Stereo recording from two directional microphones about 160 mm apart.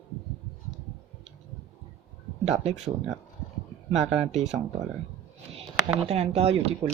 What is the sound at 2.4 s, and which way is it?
Speech, 45° right (ahead or behind).